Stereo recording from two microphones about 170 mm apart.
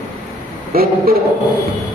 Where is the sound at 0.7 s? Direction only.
60° right (ahead or behind).